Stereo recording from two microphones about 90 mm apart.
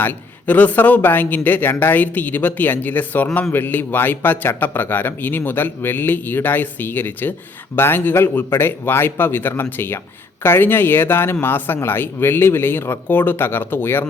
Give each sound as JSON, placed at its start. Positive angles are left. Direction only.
{"t": 0.0, "sound": "a man's voice", "side_deg": 20}